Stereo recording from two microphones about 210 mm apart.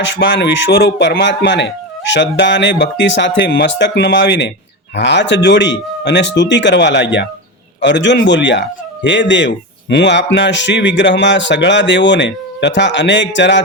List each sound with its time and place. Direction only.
0.0 s speech: 60° left (ahead or behind)